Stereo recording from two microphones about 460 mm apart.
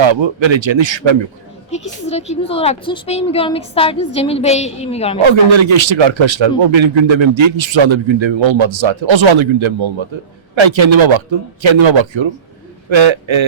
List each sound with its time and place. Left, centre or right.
0.0 s a man's voice: right
1.7 s a woman's voice: centre
5.2 s a man's voice: right
10.5 s a man's voice: right